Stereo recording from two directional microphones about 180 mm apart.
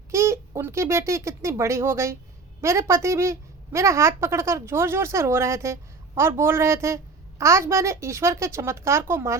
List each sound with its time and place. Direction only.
0.1 s a woman's voice: 15° right (ahead or behind)